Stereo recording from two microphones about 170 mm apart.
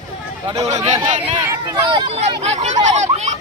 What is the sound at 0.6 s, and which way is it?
Speech, 20° right (ahead or behind).